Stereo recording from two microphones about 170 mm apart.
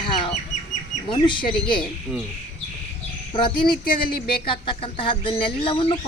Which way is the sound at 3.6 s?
55° left (ahead or behind).